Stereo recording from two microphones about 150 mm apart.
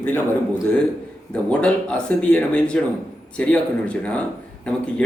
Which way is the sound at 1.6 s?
5° left (ahead or behind).